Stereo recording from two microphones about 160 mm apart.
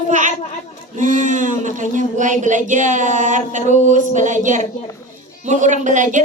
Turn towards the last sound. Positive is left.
turn(degrees=-50)  # may be behind; listen again after turning